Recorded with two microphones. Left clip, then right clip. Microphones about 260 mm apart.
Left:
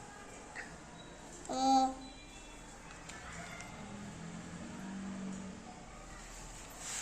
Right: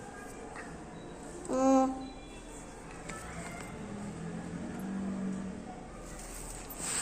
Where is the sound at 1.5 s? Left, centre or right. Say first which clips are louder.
Right 3 dB; centre.